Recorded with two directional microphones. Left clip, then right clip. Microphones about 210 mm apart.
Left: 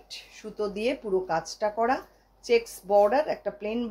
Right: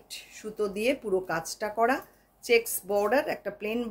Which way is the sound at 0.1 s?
25° right (ahead or behind).